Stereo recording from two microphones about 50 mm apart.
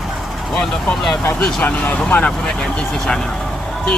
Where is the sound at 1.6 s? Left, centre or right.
Left.